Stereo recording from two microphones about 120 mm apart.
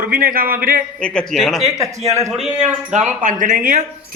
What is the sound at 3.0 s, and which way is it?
Speech, 85° right.